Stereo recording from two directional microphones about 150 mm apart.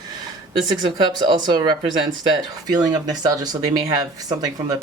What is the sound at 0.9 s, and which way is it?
Speech, 30° right (ahead or behind).